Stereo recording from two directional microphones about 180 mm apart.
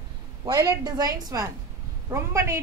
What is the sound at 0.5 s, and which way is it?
A woman's voice, 20° right (ahead or behind).